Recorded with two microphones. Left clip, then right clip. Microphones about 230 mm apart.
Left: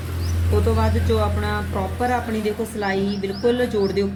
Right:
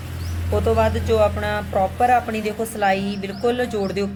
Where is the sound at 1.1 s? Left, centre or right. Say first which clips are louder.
Right 4 dB; right.